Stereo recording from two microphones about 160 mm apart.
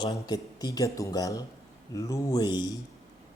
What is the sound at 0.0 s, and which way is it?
Speech, 25° left (ahead or behind).